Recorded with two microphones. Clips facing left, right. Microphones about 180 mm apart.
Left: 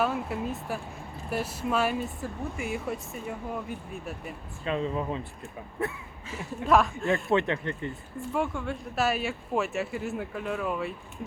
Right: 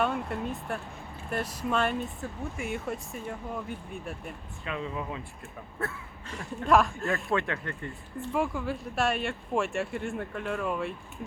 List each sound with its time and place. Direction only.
0.0 s speech: centre (ahead or behind)
4.6 s speech: 35° left (ahead or behind)
6.2 s speech: centre (ahead or behind)
7.3 s speech: 20° left (ahead or behind)
8.2 s speech: centre (ahead or behind)